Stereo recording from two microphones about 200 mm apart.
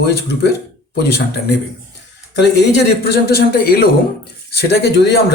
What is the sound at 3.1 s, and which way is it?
A man's voice, 50° left (ahead or behind).